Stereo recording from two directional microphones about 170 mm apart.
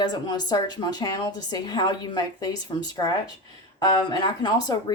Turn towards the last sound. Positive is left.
turn(degrees=25)  # may be behind; listen again after turning